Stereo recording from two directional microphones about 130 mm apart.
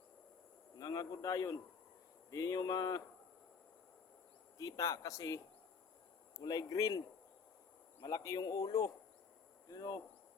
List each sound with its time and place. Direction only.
0.8 s a man's voice: 25° left (ahead or behind)
4.5 s a man's voice: 25° left (ahead or behind)
6.4 s a man's voice: 30° left (ahead or behind)
8.0 s a man's voice: 25° left (ahead or behind)